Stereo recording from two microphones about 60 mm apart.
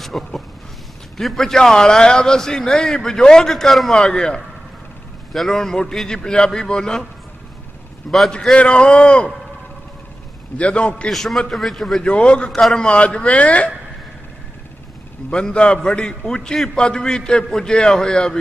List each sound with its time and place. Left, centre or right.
0.0 s a sound: centre
1.1 s a man's voice: centre
8.3 s a man's voice: centre
10.6 s a man's voice: centre
11.1 s a man's voice: centre
12.0 s a man's voice: centre
15.2 s a man's voice: centre